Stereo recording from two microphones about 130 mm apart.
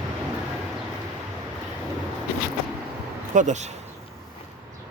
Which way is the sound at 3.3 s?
65° right (ahead or behind).